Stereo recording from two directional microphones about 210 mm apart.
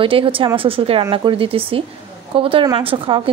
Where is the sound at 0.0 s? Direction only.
25° right (ahead or behind).